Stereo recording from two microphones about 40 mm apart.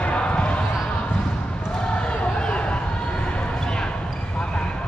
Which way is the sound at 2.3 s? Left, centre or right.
Left.